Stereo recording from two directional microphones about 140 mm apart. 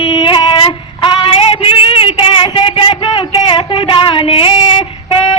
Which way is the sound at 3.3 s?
30° left (ahead or behind).